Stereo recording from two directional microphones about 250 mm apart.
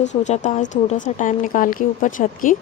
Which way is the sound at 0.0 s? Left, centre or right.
Left.